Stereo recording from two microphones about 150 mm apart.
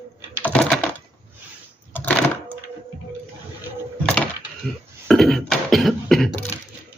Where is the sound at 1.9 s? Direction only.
10° left (ahead or behind).